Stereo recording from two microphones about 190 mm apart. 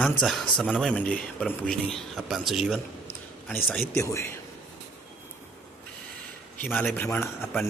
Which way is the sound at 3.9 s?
15° left (ahead or behind).